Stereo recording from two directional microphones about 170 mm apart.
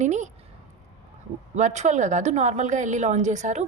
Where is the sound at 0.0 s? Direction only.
45° right (ahead or behind).